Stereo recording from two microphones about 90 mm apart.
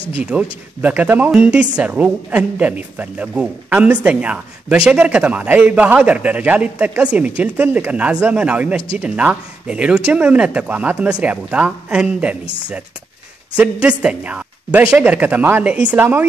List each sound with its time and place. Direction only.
0.2 s a woman's voice: 15° right (ahead or behind)
13.6 s a woman's voice: 10° right (ahead or behind)